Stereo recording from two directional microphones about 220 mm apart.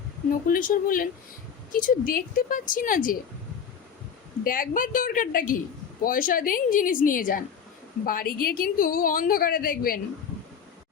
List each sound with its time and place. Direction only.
0.3 s a woman's voice: 40° left (ahead or behind)
4.4 s a woman's voice: 40° left (ahead or behind)